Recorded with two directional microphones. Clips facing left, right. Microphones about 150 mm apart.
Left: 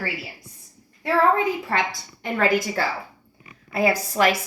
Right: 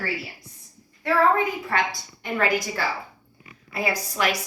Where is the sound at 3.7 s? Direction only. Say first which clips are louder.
Left 6 dB; 40° left (ahead or behind).